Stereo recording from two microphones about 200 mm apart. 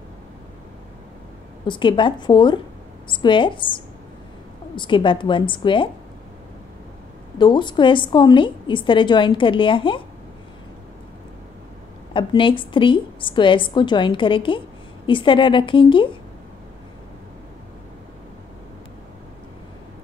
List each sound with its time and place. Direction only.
1.7 s a woman's voice: 25° left (ahead or behind)
7.3 s a woman's voice: 25° left (ahead or behind)
12.1 s a woman's voice: 25° left (ahead or behind)